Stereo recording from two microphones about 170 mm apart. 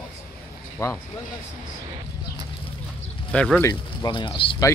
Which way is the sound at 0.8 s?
15° left (ahead or behind).